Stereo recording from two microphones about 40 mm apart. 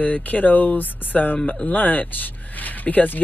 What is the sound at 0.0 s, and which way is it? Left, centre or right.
Speech, left.